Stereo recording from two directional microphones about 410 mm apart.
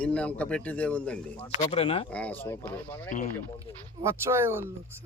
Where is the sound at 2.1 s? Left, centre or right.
Centre.